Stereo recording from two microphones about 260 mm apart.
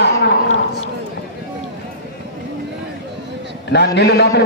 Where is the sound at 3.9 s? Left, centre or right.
Left.